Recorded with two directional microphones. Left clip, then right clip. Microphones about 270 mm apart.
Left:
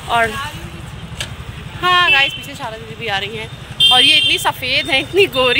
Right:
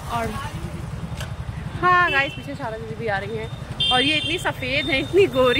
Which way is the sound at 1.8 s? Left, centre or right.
Centre.